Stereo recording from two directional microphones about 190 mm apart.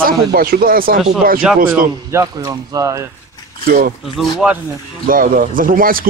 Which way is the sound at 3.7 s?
50° right (ahead or behind).